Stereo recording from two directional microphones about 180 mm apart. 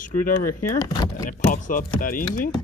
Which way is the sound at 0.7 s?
20° left (ahead or behind).